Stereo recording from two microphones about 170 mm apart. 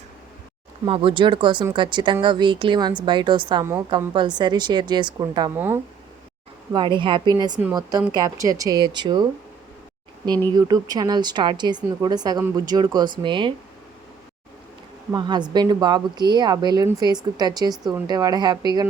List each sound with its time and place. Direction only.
0.9 s speech: 30° right (ahead or behind)
5.5 s speech: 10° right (ahead or behind)
6.7 s speech: 30° right (ahead or behind)
10.5 s speech: 25° right (ahead or behind)
15.1 s speech: 25° right (ahead or behind)